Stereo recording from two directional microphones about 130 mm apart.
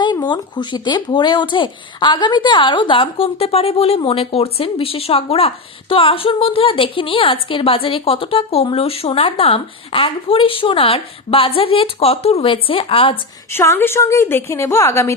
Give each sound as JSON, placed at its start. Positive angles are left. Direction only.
{"t": 0.0, "sound": "a child's voice", "side_deg": 35}
{"t": 13.5, "sound": "a woman's voice", "side_deg": 20}